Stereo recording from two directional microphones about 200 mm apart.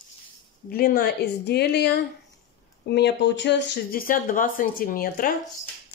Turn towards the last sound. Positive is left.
turn(degrees=45)  # may be behind; listen again after turning